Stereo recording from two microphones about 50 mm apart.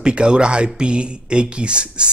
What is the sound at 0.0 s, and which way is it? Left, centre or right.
Speech, centre.